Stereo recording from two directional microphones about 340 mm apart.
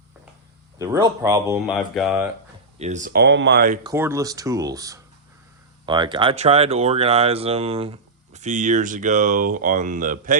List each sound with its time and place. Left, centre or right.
0.8 s speech: centre
2.7 s speech: centre
3.8 s speech: centre; by 10.3 s right